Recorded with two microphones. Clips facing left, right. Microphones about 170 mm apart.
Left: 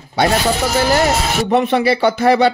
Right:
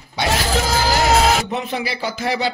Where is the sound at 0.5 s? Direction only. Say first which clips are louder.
Left 2 dB; 90° right.